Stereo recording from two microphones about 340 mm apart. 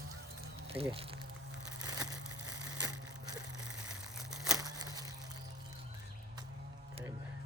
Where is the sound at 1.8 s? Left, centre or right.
Centre.